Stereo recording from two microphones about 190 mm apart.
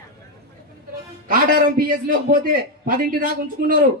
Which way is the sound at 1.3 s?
45° right (ahead or behind).